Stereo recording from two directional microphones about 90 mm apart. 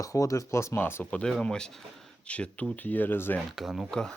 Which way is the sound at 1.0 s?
15° left (ahead or behind).